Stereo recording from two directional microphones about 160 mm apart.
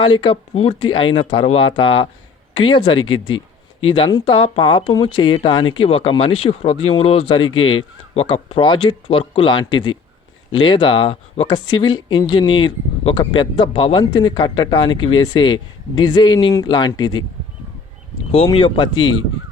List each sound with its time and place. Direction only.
0.0 s speech: 30° left (ahead or behind)
18.5 s speech: 30° left (ahead or behind)